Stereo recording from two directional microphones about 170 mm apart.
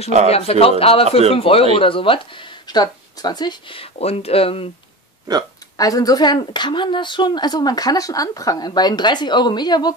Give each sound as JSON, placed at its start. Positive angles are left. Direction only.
{"t": 0.3, "sound": "speech", "side_deg": 35}
{"t": 5.8, "sound": "speech", "side_deg": 20}